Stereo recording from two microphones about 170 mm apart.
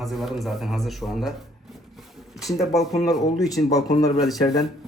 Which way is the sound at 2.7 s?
Centre (ahead or behind).